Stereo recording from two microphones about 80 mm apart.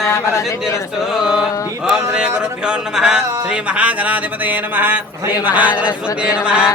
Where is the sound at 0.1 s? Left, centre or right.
Left.